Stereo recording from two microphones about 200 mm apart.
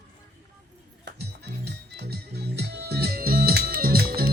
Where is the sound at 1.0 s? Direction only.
55° right (ahead or behind).